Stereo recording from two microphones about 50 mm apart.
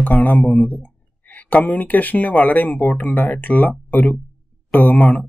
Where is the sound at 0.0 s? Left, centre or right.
Left.